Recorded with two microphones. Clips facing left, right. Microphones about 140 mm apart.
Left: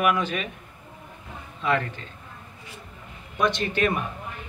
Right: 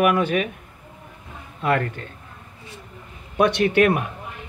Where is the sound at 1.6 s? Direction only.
55° right (ahead or behind).